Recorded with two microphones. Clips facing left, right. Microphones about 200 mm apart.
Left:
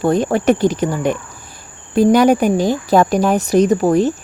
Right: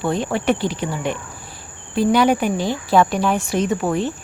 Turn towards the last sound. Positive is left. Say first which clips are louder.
# left 7 dB
turn(degrees=40)  # may be behind; listen again after turning